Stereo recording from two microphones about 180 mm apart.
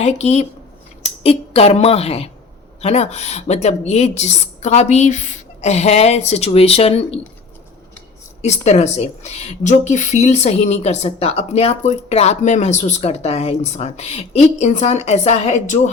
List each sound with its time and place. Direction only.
0.0 s speech: 35° left (ahead or behind)
8.4 s speech: 40° left (ahead or behind)